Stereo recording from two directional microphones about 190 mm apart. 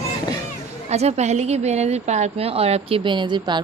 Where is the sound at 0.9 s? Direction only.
35° right (ahead or behind).